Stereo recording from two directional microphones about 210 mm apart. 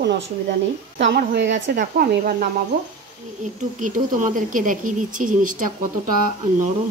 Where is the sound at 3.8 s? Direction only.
40° right (ahead or behind).